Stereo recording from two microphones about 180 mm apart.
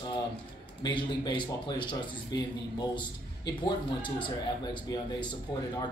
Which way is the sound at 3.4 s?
25° left (ahead or behind).